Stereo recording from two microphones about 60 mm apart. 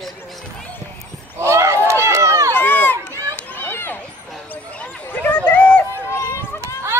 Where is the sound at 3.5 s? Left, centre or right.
Left.